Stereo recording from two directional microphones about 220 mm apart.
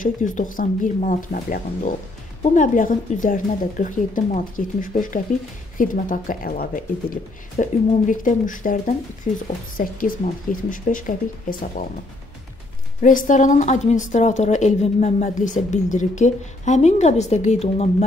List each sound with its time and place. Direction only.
0.0 s a woman's voice: 35° left (ahead or behind)
13.0 s a woman's voice: 35° left (ahead or behind)